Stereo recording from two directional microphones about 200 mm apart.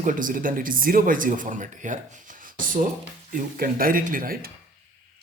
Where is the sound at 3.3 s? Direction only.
45° right (ahead or behind).